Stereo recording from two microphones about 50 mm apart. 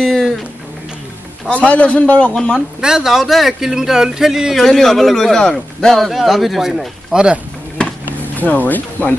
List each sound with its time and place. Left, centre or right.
0.0 s music: centre
1.5 s a man's voice: left
2.8 s speech: centre
4.6 s a man's voice: centre
7.1 s speech: centre
8.4 s speech: left